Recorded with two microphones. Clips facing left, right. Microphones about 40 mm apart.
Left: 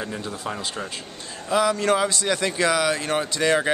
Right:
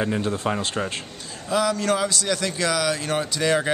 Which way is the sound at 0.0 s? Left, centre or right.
Right.